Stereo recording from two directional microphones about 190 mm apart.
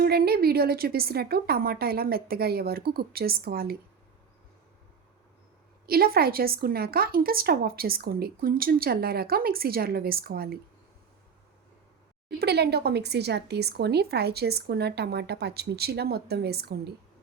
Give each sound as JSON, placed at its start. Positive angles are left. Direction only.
{"t": 0.0, "sound": "a woman's voice", "side_deg": -55}
{"t": 5.8, "sound": "a woman's voice", "side_deg": -55}
{"t": 12.4, "sound": "speech", "side_deg": -60}